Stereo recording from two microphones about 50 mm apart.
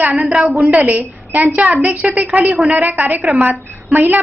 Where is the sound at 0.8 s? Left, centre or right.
Right.